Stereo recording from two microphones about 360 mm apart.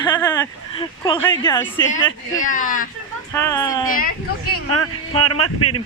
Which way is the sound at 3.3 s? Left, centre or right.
Centre.